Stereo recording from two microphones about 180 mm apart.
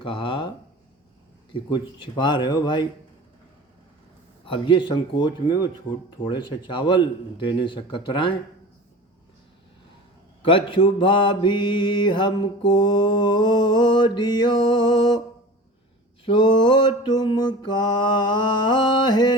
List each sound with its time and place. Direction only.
0.0 s mantra: 30° left (ahead or behind)
1.5 s mantra: 25° left (ahead or behind)
4.4 s mantra: 30° left (ahead or behind)
10.4 s mantra: 30° left (ahead or behind)
16.2 s mantra: 25° left (ahead or behind)